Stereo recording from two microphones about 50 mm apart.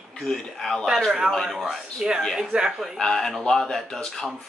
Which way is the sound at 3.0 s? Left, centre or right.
Centre.